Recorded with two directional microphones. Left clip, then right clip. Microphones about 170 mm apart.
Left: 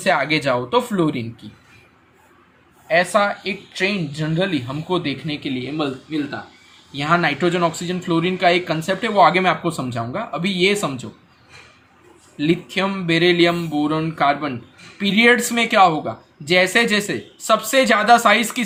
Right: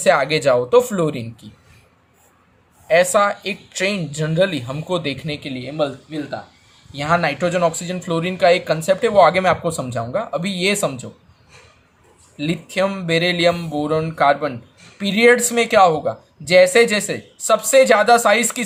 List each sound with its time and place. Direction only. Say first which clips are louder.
0.0 s speech: right 3 dB; 35° right (ahead or behind)
2.8 s speech: right 2 dB; 45° right (ahead or behind)
12.4 s speech: even; 35° right (ahead or behind)